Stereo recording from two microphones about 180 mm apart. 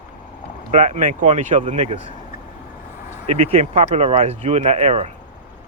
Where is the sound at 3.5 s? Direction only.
35° right (ahead or behind).